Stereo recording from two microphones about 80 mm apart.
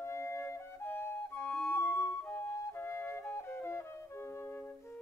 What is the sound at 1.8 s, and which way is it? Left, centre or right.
Flute, left.